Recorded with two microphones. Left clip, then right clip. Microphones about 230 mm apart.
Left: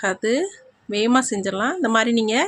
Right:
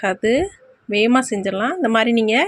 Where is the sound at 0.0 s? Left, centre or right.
Centre.